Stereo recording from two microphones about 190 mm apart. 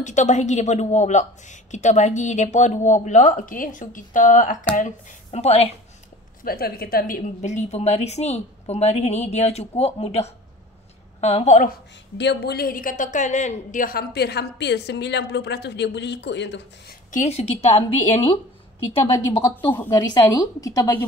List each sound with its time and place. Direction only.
0.0 s a woman's voice: 40° left (ahead or behind)
6.4 s a woman's voice: 55° left (ahead or behind)
12.2 s a woman's voice: 65° left (ahead or behind)
17.1 s a woman's voice: 35° left (ahead or behind)
19.2 s a woman's voice: 15° left (ahead or behind)